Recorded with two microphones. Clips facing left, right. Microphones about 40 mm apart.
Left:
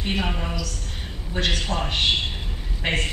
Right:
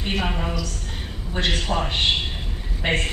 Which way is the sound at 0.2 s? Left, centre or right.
Centre.